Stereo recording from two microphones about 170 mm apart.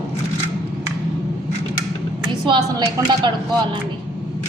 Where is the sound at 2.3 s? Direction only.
30° right (ahead or behind).